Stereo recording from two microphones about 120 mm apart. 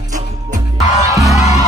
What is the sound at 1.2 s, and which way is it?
Music, 70° left (ahead or behind).